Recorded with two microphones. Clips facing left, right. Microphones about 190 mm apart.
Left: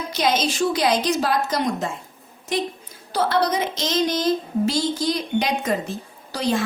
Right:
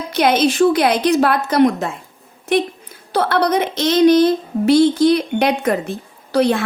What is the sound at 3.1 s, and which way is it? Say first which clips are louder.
A woman's voice: right 4 dB; 60° right (ahead or behind).